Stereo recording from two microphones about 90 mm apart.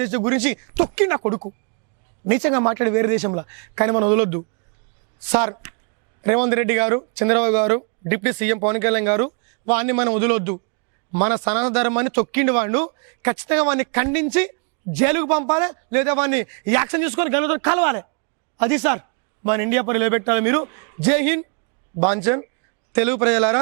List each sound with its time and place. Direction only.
0.0 s a man's voice: 15° right (ahead or behind)